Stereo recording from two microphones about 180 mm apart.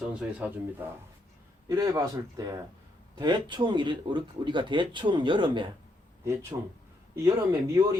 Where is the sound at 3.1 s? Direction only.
25° right (ahead or behind).